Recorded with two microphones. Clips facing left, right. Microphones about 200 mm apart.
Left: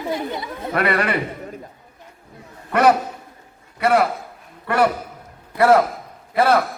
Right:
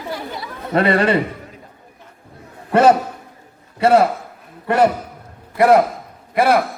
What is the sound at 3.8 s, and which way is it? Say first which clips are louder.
A man's voice: right 4 dB; 25° right (ahead or behind).